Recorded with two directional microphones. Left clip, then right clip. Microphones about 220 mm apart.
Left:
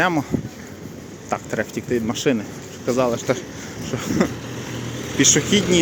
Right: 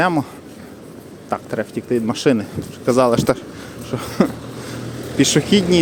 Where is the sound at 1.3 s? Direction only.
10° right (ahead or behind); by 3.4 s 35° right (ahead or behind).